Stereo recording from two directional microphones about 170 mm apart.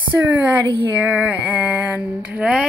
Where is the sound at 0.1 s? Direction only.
10° right (ahead or behind).